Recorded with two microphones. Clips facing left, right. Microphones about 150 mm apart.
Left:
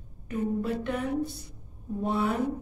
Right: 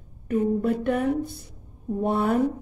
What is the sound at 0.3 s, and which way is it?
Speech, 55° right (ahead or behind).